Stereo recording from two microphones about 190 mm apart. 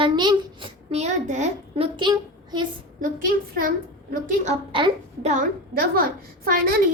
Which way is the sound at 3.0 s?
45° right (ahead or behind).